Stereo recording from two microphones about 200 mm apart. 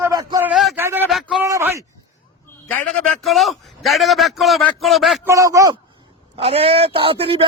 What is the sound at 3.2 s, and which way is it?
A man's voice, centre (ahead or behind).